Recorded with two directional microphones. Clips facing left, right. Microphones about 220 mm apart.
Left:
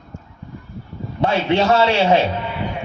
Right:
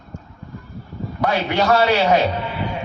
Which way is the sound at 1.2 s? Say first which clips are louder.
Left 2 dB; 25° left (ahead or behind).